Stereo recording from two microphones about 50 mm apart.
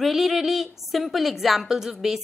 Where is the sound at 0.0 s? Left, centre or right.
Centre.